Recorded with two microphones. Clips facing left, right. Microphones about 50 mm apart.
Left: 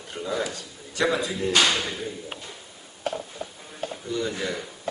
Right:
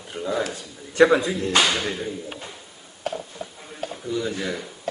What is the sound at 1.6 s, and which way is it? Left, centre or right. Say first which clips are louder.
Speech: right 1 dB; centre.